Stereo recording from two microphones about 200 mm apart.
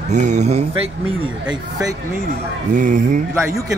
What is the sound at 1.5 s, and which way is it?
Speech, 15° right (ahead or behind).